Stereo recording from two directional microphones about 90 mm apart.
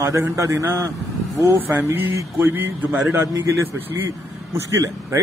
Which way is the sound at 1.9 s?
25° right (ahead or behind).